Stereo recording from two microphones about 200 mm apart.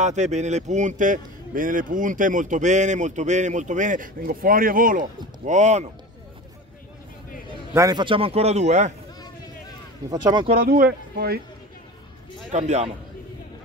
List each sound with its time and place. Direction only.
0.0 s a man's voice: 35° right (ahead or behind)
7.7 s a man's voice: 20° right (ahead or behind); by 8.9 s 35° right (ahead or behind)
10.0 s a man's voice: 20° right (ahead or behind)
10.5 s speech: 45° right (ahead or behind)
12.5 s a man's voice: 35° right (ahead or behind)